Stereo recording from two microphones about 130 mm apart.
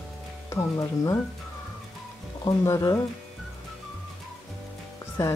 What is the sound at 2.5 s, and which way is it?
Speech, 25° left (ahead or behind).